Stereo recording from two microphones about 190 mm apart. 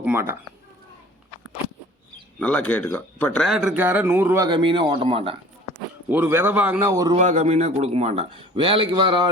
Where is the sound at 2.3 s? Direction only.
5° left (ahead or behind); by 5.3 s 30° right (ahead or behind).